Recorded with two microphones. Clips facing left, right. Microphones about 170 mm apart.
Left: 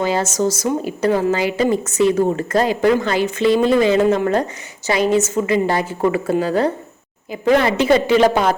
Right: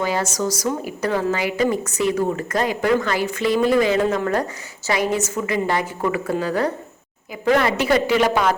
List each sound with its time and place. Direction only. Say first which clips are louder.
0.0 s speech: left 4 dB; 25° left (ahead or behind)